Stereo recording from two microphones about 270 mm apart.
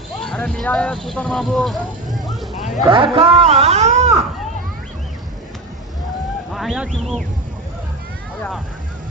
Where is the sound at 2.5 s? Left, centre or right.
Left.